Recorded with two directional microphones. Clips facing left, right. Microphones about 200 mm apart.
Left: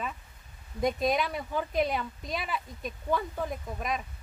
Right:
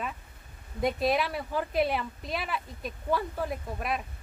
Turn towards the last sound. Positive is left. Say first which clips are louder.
# right 1 dB
turn(degrees=-5)  # may be behind; listen again after turning